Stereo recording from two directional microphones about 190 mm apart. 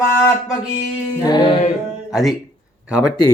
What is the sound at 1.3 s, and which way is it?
Music, 20° left (ahead or behind).